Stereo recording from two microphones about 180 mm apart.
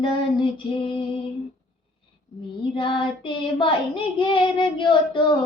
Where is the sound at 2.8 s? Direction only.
25° left (ahead or behind).